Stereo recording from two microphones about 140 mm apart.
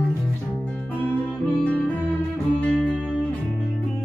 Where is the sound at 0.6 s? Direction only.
10° left (ahead or behind).